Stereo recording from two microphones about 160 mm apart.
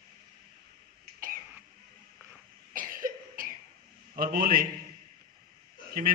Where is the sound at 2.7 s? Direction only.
60° right (ahead or behind).